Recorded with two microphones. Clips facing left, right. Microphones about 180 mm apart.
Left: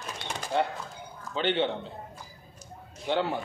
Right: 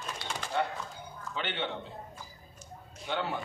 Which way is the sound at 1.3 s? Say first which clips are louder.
Left 9 dB; 30° left (ahead or behind).